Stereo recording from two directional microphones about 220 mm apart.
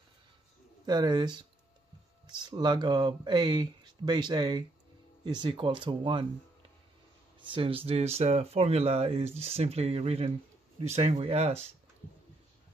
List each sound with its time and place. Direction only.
0.8 s speech: 20° right (ahead or behind)
7.3 s speech: 25° right (ahead or behind)